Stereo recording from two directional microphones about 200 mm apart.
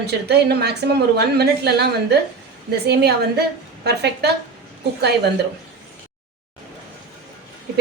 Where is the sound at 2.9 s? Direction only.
55° right (ahead or behind).